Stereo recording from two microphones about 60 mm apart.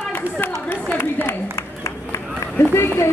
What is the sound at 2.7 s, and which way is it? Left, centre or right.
Speech, left.